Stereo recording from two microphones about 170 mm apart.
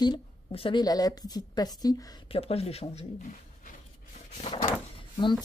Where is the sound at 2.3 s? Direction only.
35° left (ahead or behind).